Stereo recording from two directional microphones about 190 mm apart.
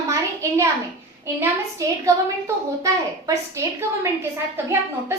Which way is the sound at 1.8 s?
15° right (ahead or behind).